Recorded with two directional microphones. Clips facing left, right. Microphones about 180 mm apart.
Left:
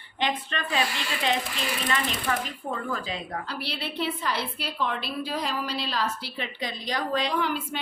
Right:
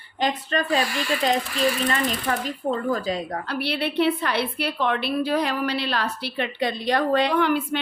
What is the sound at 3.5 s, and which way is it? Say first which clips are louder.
A woman's voice: right 8 dB; 65° right (ahead or behind).